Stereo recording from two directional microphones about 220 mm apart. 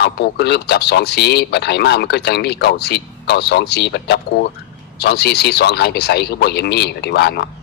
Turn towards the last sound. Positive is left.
turn(degrees=50)  # may be behind; listen again after turning